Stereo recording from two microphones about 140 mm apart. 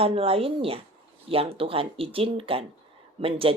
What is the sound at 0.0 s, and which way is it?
Speech, 45° right (ahead or behind).